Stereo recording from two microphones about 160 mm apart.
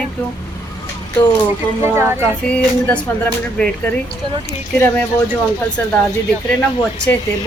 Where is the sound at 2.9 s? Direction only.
10° left (ahead or behind).